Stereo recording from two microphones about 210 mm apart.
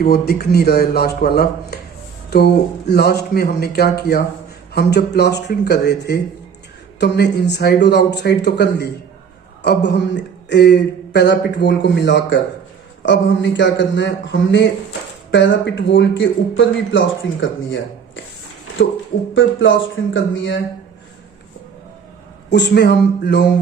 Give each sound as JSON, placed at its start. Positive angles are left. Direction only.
{"t": 0.0, "sound": "speech", "side_deg": 50}
{"t": 19.3, "sound": "speech", "side_deg": 65}
{"t": 22.4, "sound": "speech", "side_deg": 55}